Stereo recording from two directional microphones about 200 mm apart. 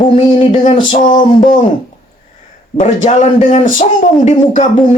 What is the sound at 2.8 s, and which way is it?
Speech, 35° left (ahead or behind).